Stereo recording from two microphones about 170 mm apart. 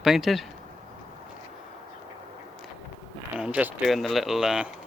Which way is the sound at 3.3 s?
5° right (ahead or behind).